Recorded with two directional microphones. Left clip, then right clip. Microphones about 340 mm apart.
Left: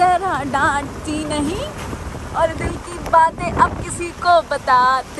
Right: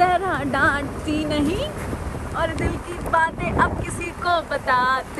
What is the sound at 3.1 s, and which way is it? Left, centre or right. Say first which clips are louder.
Speech: left 6 dB; centre.